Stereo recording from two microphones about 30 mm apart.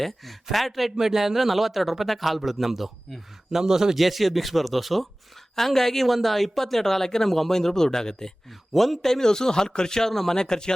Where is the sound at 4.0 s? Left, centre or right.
Centre.